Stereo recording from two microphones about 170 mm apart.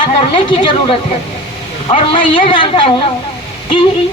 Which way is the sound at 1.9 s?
30° left (ahead or behind).